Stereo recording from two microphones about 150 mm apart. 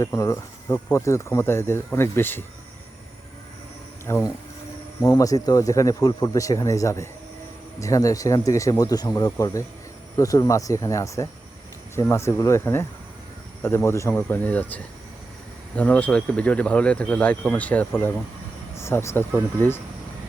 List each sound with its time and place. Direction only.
0.0 s speech: 20° left (ahead or behind)
4.0 s speech: 20° left (ahead or behind)